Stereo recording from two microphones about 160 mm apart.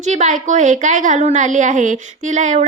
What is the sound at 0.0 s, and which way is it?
A woman's voice, 50° right (ahead or behind).